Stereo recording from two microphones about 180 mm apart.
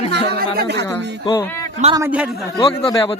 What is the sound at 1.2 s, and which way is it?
Speech, 25° left (ahead or behind).